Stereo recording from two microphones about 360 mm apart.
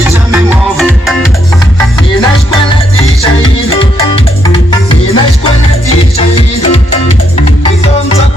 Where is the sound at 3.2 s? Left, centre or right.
Centre.